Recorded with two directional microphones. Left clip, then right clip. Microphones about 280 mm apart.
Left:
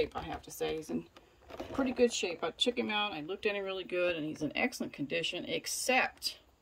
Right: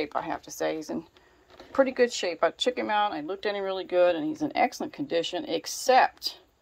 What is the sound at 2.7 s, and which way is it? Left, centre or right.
Speech, right.